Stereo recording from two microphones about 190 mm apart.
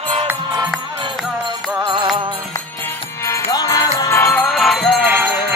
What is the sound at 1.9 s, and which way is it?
Music, 25° right (ahead or behind).